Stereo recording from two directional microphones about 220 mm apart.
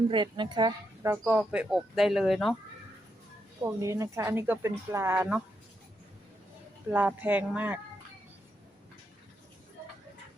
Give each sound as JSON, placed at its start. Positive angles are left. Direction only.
{"t": 0.1, "sound": "speech", "side_deg": -20}
{"t": 1.1, "sound": "speech", "side_deg": -10}
{"t": 3.6, "sound": "speech", "side_deg": -15}
{"t": 6.9, "sound": "speech", "side_deg": -10}